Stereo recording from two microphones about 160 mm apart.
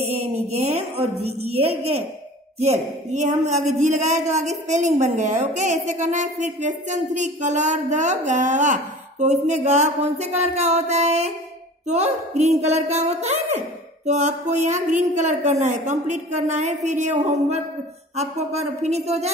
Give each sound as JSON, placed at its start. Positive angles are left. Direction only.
{"t": 0.2, "sound": "a woman's voice", "side_deg": -40}